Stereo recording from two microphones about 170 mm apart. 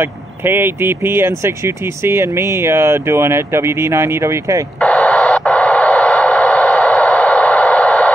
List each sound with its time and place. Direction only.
0.0 s speech: 15° right (ahead or behind)
4.7 s radio: 5° left (ahead or behind)